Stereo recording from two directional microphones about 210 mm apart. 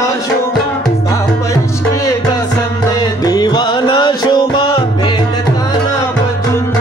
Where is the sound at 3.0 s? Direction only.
20° left (ahead or behind).